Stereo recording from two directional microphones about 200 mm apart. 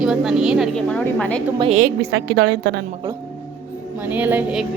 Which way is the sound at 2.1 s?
60° right (ahead or behind).